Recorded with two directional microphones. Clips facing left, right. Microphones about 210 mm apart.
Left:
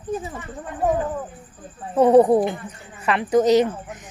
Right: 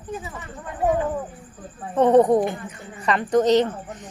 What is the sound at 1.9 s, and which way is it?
A woman's voice, 10° left (ahead or behind).